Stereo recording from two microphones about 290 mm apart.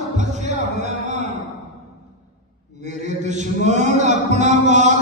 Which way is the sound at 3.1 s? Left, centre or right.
Right.